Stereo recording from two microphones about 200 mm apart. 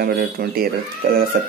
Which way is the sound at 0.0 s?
50° right (ahead or behind).